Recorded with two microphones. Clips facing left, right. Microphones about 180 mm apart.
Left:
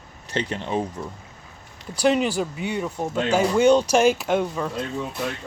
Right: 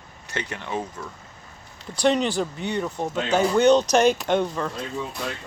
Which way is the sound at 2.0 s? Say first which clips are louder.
Left 1 dB; 5° left (ahead or behind).